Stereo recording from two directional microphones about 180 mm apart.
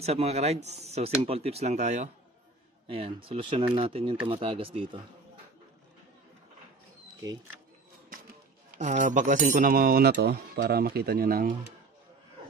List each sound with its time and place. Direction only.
0.0 s speech: 35° right (ahead or behind)
8.7 s speech: 45° right (ahead or behind)